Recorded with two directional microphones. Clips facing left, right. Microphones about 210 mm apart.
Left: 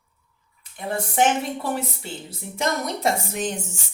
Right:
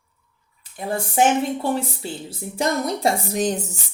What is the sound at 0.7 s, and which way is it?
A woman's voice, 30° right (ahead or behind).